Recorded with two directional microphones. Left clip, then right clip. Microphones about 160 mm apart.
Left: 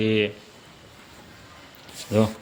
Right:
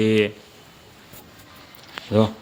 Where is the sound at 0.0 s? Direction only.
35° right (ahead or behind).